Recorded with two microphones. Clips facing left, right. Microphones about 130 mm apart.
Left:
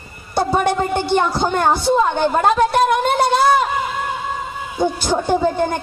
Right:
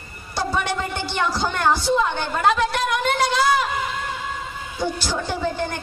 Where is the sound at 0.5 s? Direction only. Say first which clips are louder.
Left 8 dB; 50° left (ahead or behind).